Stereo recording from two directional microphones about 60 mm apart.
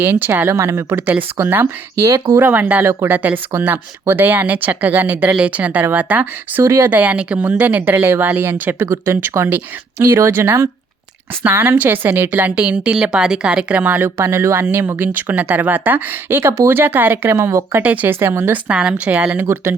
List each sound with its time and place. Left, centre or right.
0.0 s speech: right
0.9 s speech: right
2.0 s speech: right
2.4 s speech: right
6.6 s speech: right
6.9 s speech: right
12.9 s speech: centre; by 14.3 s right
14.3 s speech: right
17.8 s speech: right
19.4 s speech: right